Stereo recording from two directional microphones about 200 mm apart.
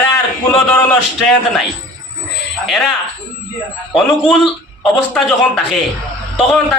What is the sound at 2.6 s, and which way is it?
Speech, centre (ahead or behind).